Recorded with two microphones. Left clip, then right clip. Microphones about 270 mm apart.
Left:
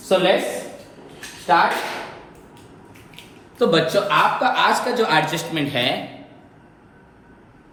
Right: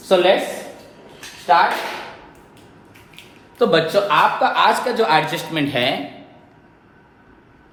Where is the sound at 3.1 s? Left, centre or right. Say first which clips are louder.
Right 3 dB; right.